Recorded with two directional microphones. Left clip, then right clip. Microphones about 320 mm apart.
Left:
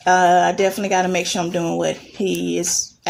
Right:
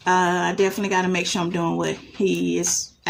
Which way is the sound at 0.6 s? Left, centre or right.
Centre.